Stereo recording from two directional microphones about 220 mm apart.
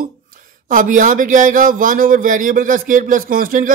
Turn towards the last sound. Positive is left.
turn(degrees=-40)  # may be behind; listen again after turning